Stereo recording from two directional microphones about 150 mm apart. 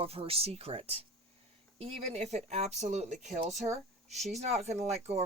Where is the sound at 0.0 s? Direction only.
40° right (ahead or behind).